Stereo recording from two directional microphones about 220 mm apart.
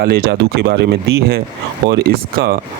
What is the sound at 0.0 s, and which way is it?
Speech, 45° right (ahead or behind).